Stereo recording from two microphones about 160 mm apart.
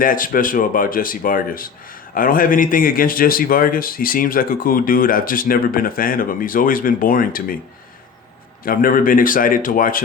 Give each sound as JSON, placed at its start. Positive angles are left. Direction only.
{"t": 0.0, "sound": "a man's voice", "side_deg": 60}
{"t": 8.6, "sound": "a man's voice", "side_deg": 60}